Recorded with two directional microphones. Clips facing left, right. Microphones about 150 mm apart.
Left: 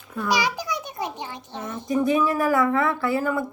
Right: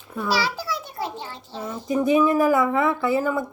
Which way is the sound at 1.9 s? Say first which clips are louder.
Right 2 dB; 5° right (ahead or behind).